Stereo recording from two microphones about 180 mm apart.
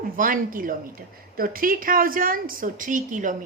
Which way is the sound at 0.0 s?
50° right (ahead or behind).